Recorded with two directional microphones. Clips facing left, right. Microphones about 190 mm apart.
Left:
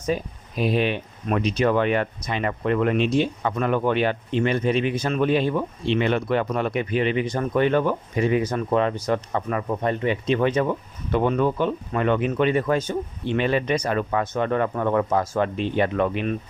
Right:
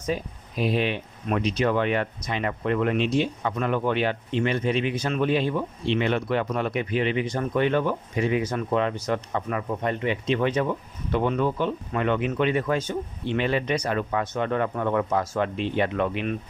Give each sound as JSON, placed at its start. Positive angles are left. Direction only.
{"t": 0.1, "sound": "speech", "side_deg": 50}